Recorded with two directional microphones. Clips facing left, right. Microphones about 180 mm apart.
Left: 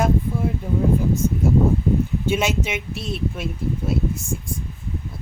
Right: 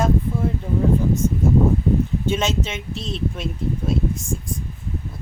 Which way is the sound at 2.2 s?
10° left (ahead or behind).